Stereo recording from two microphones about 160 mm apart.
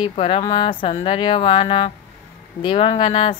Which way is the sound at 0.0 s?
35° left (ahead or behind).